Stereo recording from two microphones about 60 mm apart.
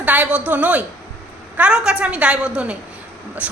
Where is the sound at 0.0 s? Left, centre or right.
Right.